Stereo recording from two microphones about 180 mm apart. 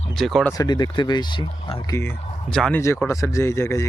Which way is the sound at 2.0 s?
10° left (ahead or behind).